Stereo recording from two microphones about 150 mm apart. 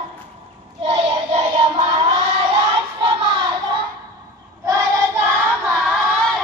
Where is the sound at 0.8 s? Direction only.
45° right (ahead or behind).